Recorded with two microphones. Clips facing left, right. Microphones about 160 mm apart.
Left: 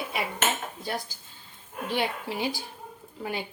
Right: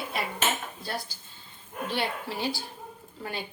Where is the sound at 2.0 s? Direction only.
15° left (ahead or behind).